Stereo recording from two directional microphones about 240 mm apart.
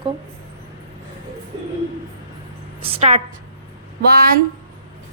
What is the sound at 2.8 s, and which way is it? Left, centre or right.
Speech, right.